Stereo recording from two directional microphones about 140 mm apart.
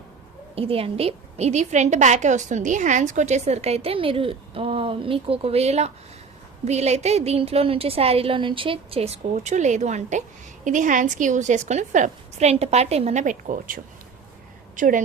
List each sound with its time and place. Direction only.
0.5 s a woman's voice: 45° right (ahead or behind); by 15.0 s 70° right (ahead or behind)